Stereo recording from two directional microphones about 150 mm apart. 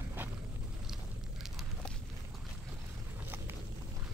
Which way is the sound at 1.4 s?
Centre (ahead or behind).